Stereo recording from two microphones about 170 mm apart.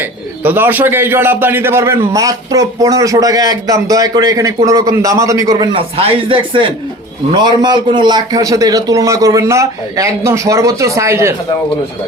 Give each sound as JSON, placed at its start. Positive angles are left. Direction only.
{"t": 0.4, "sound": "a man's voice", "side_deg": -10}
{"t": 5.7, "sound": "a man's voice", "side_deg": -30}